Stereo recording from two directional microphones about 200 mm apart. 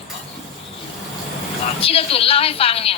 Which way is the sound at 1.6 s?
30° left (ahead or behind).